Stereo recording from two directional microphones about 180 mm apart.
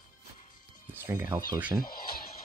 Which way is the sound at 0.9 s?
10° right (ahead or behind).